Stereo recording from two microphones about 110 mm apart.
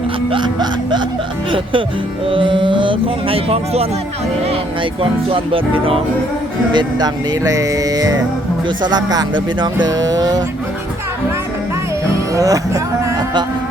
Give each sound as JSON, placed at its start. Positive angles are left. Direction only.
{"t": 0.3, "sound": "speech", "side_deg": -45}
{"t": 2.3, "sound": "speech", "side_deg": -50}
{"t": 5.3, "sound": "music", "side_deg": -55}
{"t": 6.7, "sound": "speech", "side_deg": -35}
{"t": 12.1, "sound": "music", "side_deg": -30}